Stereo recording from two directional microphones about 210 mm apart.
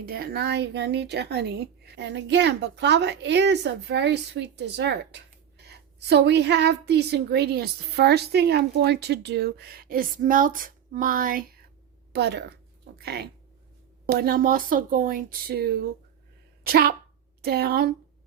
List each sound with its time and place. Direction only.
0.0 s a woman's voice: 45° right (ahead or behind)
12.1 s a woman's voice: 50° right (ahead or behind)